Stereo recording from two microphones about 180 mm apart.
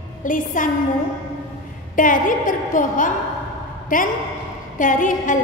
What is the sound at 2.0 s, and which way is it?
A woman's voice, 50° left (ahead or behind).